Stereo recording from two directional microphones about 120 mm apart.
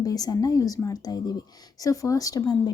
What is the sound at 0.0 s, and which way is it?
Speech, 30° left (ahead or behind).